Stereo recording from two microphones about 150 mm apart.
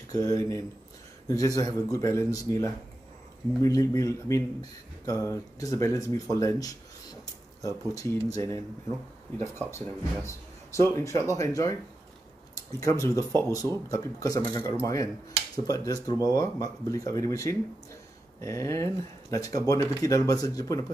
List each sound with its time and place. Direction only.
0.1 s speech: 20° left (ahead or behind)
13.0 s speech: 20° left (ahead or behind)